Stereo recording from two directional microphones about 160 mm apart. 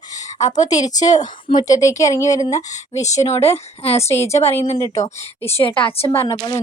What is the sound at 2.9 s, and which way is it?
Speech, 45° left (ahead or behind).